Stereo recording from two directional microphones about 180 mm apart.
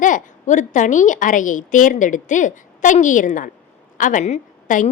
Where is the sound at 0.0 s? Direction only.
45° left (ahead or behind).